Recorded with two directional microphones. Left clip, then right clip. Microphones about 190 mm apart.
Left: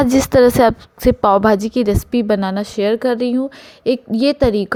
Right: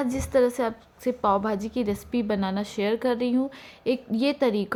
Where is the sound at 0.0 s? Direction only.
45° left (ahead or behind).